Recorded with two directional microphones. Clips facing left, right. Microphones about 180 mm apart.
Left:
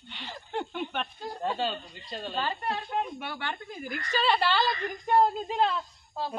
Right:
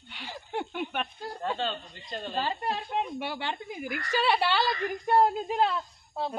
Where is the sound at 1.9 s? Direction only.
Centre (ahead or behind).